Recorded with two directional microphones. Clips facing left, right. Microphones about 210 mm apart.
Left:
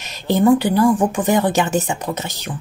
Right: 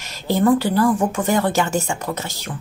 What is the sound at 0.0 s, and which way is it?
Speech, 20° left (ahead or behind).